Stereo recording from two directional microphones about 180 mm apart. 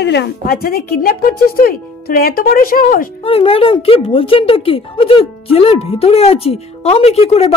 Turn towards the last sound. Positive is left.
turn(degrees=35)  # may be behind; listen again after turning